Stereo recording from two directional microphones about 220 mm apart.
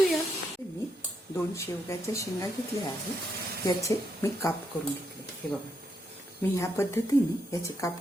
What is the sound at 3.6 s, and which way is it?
Speech, 15° left (ahead or behind).